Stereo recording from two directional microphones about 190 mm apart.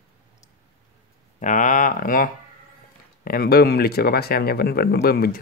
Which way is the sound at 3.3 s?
55° left (ahead or behind).